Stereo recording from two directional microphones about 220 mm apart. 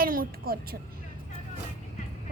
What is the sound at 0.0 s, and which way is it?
Speech, 40° right (ahead or behind).